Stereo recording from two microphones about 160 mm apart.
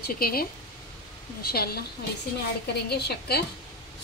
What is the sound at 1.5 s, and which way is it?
Speech, 75° left (ahead or behind).